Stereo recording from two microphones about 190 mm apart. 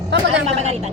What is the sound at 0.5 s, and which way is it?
Speech, 35° right (ahead or behind).